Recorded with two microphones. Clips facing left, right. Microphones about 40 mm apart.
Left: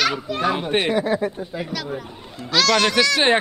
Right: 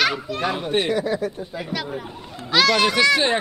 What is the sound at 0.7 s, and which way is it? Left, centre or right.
Speech, left.